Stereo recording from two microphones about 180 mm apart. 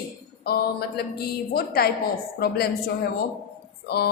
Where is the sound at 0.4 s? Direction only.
60° left (ahead or behind).